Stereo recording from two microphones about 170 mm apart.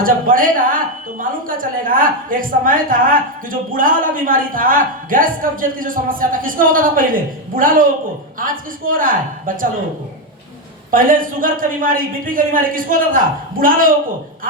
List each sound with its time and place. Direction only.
0.0 s a woman's voice: 55° right (ahead or behind)
8.9 s a woman's voice: 55° right (ahead or behind)
10.9 s a woman's voice: 55° right (ahead or behind)